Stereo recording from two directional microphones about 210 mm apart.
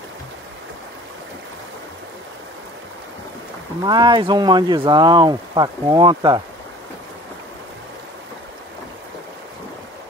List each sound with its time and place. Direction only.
3.8 s speech: 20° right (ahead or behind)